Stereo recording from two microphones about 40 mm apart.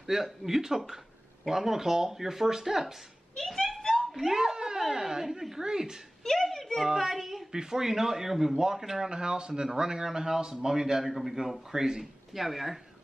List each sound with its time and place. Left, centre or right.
0.0 s a man's voice: centre
3.3 s speech: centre
3.9 s speech: centre
6.2 s a sound: centre
7.0 s a child's voice: centre
9.1 s a man's voice: right; by 12.7 s centre